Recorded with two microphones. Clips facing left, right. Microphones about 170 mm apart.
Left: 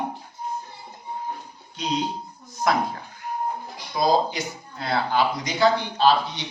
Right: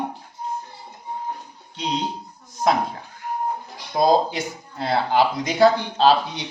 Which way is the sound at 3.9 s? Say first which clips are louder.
Right 4 dB; 45° right (ahead or behind).